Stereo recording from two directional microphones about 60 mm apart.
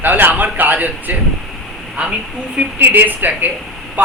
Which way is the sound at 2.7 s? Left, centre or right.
Right.